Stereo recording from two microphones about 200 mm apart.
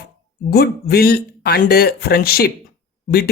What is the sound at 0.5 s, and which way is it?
Speech, 50° left (ahead or behind).